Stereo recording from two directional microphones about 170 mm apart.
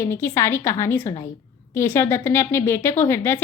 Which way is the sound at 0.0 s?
15° left (ahead or behind).